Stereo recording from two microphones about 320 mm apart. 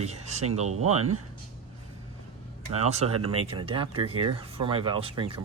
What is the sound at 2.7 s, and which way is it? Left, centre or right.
Speech, centre.